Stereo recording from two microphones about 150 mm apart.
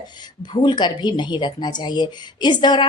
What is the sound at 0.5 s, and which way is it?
A woman's voice, 30° left (ahead or behind).